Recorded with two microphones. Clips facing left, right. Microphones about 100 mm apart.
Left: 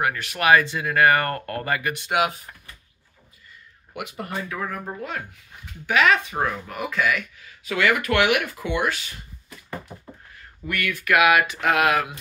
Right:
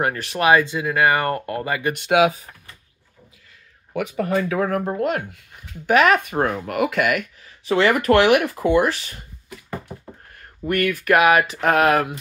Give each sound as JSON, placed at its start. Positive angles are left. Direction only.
{"t": 0.0, "sound": "speech", "side_deg": -35}
{"t": 2.0, "sound": "speech", "side_deg": -90}
{"t": 4.4, "sound": "speech", "side_deg": -80}
{"t": 5.9, "sound": "speech", "side_deg": -45}
{"t": 6.7, "sound": "speech", "side_deg": -75}
{"t": 7.4, "sound": "speech", "side_deg": -35}
{"t": 10.6, "sound": "speech", "side_deg": -40}